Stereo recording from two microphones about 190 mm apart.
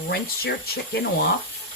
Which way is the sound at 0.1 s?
55° left (ahead or behind).